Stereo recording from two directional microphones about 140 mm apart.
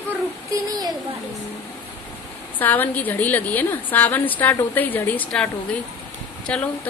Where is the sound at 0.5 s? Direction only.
25° right (ahead or behind).